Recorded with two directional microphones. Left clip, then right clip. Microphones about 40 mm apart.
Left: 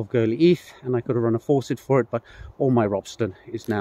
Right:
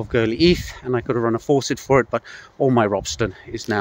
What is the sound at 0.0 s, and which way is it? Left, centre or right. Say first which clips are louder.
Speech: right 2 dB; left.